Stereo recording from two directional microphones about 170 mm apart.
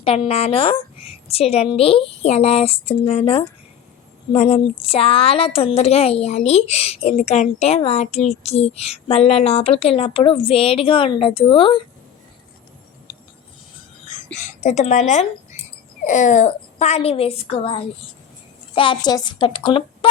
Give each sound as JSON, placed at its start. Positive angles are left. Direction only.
{"t": 0.0, "sound": "a woman's voice", "side_deg": 35}
{"t": 14.3, "sound": "a woman's voice", "side_deg": 45}